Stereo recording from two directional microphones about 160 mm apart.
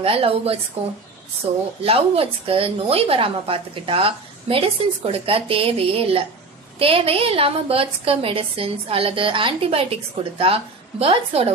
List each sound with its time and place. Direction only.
0.0 s a woman's voice: 35° right (ahead or behind)